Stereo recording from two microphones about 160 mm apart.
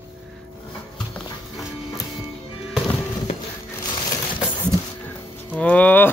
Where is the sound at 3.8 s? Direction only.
25° left (ahead or behind).